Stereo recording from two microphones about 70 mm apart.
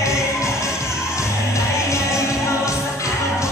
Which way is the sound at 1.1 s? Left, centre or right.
Left.